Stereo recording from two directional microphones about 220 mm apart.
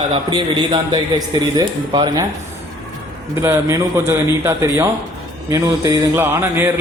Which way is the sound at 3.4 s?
10° right (ahead or behind).